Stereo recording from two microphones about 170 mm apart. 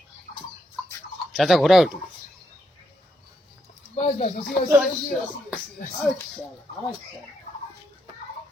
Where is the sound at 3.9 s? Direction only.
45° left (ahead or behind).